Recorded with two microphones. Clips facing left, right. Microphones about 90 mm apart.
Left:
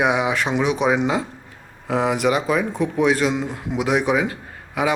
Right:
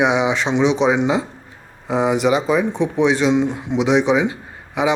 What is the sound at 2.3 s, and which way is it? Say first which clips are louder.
Speech: right 2 dB; 30° right (ahead or behind).